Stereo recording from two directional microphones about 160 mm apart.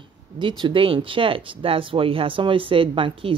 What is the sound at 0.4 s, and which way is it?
Speech, 30° right (ahead or behind).